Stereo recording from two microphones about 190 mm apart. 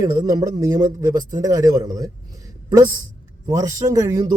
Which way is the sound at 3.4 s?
20° right (ahead or behind).